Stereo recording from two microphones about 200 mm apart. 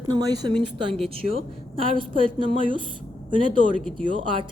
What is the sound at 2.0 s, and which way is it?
A woman's voice, 25° right (ahead or behind).